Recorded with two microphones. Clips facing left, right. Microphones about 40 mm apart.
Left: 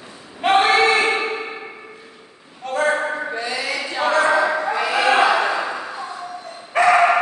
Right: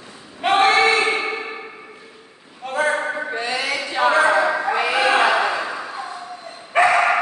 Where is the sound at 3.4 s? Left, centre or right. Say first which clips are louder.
Right 1 dB; right.